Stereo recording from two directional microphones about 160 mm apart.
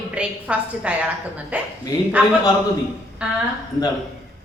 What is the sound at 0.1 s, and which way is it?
A woman's voice, 10° right (ahead or behind).